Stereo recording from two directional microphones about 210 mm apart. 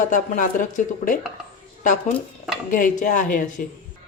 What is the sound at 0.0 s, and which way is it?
Speech, 40° left (ahead or behind).